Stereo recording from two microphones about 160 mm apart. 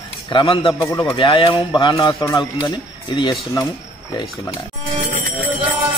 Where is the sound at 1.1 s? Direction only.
30° left (ahead or behind).